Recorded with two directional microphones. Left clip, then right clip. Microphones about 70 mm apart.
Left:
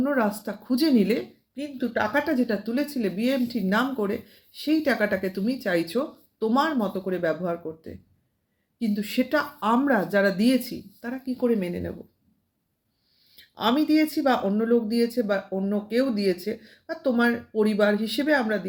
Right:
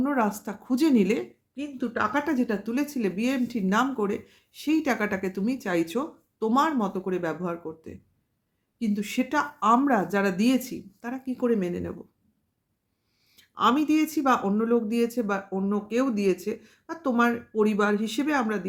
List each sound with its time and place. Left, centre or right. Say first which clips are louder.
0.0 s a woman's voice: left 1 dB; right
1.5 s a woman's voice: left 2 dB; centre
6.4 s speech: even; right
6.7 s a woman's voice: left 1 dB; right
9.0 s a woman's voice: left 2 dB; right; by 10.6 s centre
10.6 s speech: left 1 dB; right
11.1 s a woman's voice: left 1 dB; right
13.5 s a woman's voice: even; right
16.8 s speech: left 1 dB; right